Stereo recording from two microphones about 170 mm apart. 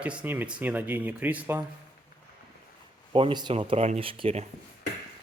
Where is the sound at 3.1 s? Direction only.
30° right (ahead or behind).